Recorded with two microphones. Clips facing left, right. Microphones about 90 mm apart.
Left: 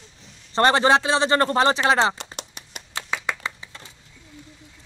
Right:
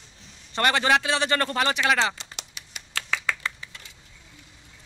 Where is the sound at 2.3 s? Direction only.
45° left (ahead or behind).